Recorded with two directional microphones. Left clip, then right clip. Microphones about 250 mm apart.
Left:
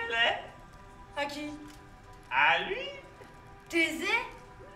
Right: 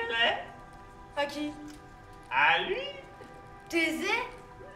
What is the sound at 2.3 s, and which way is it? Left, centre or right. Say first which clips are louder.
Speech: right 1 dB; centre.